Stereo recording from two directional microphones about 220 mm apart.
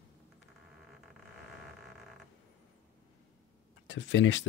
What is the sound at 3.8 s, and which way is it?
Speech, 55° left (ahead or behind).